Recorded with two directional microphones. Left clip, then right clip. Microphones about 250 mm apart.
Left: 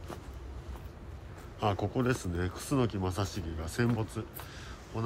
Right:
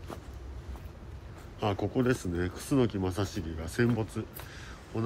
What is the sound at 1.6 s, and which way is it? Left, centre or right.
Speech, left.